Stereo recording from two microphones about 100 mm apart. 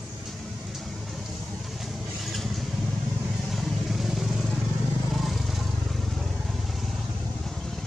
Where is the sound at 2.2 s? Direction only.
Centre (ahead or behind).